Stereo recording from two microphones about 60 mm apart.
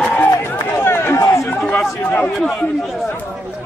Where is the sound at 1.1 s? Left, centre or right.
Left.